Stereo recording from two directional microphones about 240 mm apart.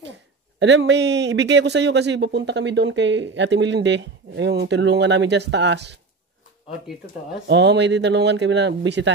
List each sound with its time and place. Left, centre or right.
0.6 s speech: right
7.4 s speech: right